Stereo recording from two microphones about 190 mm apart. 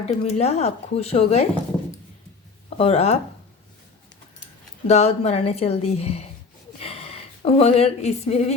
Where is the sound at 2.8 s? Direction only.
35° left (ahead or behind).